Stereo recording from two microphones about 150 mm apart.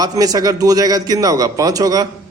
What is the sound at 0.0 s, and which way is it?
A man's voice, 25° right (ahead or behind).